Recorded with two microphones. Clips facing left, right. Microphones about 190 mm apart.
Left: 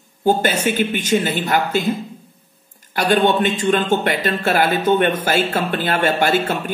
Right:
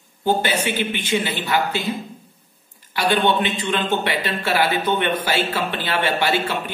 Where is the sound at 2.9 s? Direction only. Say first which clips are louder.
Left 3 dB; 45° left (ahead or behind).